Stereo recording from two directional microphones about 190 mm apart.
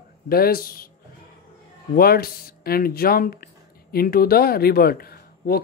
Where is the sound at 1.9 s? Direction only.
55° left (ahead or behind).